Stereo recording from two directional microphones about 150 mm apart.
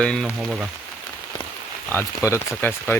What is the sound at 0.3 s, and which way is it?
Speech, 5° right (ahead or behind).